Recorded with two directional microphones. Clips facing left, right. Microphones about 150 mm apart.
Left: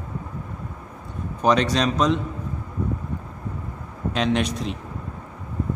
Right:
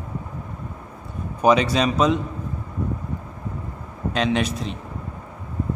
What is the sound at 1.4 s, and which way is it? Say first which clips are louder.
Speech: right 2 dB; 10° right (ahead or behind).